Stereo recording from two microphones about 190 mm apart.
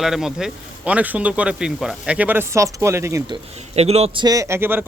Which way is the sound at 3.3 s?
35° right (ahead or behind).